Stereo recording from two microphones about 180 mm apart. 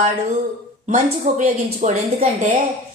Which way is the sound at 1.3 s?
40° right (ahead or behind).